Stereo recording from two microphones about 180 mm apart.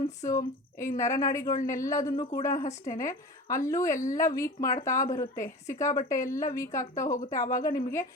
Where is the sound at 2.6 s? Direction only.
45° left (ahead or behind).